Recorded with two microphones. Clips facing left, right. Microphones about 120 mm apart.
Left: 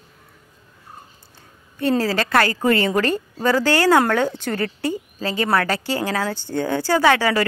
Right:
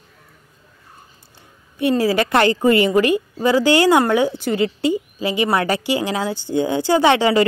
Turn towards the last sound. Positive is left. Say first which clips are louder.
# right 3 dB
turn(degrees=-20)  # may be behind; listen again after turning